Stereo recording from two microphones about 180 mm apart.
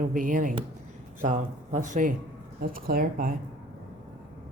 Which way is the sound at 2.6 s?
55° right (ahead or behind).